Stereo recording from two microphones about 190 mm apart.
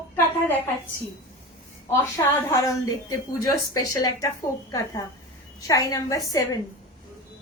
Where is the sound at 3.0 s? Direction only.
20° left (ahead or behind).